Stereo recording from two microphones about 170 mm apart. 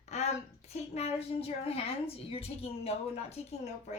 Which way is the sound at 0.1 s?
40° left (ahead or behind).